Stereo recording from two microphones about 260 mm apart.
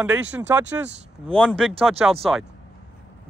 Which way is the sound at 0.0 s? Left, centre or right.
Centre.